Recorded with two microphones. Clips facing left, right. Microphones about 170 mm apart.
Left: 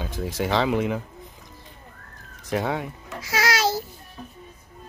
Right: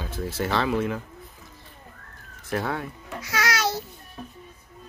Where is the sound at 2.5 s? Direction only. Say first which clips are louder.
Left 2 dB; 15° left (ahead or behind).